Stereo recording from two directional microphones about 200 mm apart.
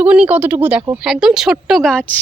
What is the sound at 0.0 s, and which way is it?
A woman's voice, 5° right (ahead or behind).